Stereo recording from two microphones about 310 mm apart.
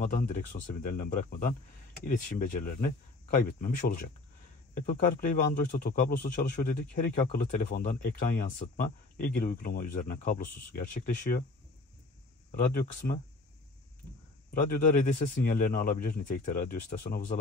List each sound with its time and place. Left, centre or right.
0.0 s speech: left
12.4 s speech: left
14.5 s speech: left